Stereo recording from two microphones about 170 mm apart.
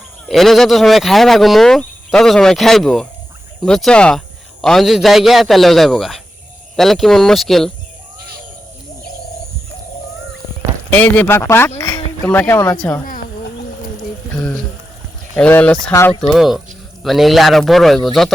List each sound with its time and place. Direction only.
0.3 s speech: centre (ahead or behind)
10.9 s speech: 10° left (ahead or behind)
14.3 s speech: 5° left (ahead or behind)
16.3 s speech: centre (ahead or behind)